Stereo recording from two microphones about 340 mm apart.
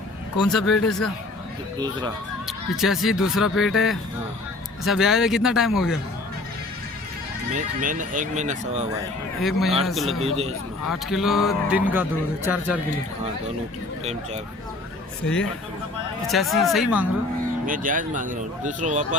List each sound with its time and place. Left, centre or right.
0.4 s speech: centre
1.8 s a man's voice: centre
2.5 s speech: centre
7.5 s speech: right
9.4 s speech: centre
10.2 s a man's voice: centre
10.8 s speech: centre
16.2 s speech: centre
17.7 s speech: right